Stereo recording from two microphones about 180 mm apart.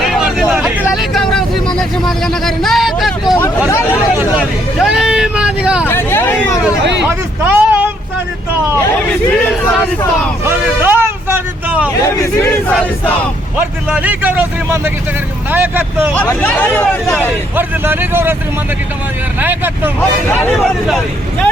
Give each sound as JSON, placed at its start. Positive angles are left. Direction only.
{"t": 0.1, "sound": "vehicle", "side_deg": -5}
{"t": 0.9, "sound": "a sound", "side_deg": 0}
{"t": 4.2, "sound": "vehicle", "side_deg": -5}
{"t": 5.8, "sound": "vehicle", "side_deg": 10}
{"t": 7.0, "sound": "vehicle", "side_deg": -10}
{"t": 10.4, "sound": "vehicle", "side_deg": -10}
{"t": 12.0, "sound": "speech", "side_deg": 15}
{"t": 13.6, "sound": "a man's voice", "side_deg": -10}
{"t": 16.1, "sound": "speech", "side_deg": 10}
{"t": 17.2, "sound": "a man's voice", "side_deg": -10}
{"t": 19.4, "sound": "a man's voice", "side_deg": -10}
{"t": 20.8, "sound": "speech", "side_deg": 0}